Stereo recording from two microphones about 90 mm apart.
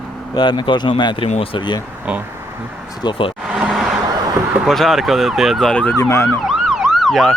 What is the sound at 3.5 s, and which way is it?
Vehicle, 10° right (ahead or behind).